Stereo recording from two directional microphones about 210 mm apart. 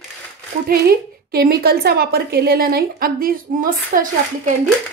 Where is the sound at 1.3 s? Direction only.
50° right (ahead or behind).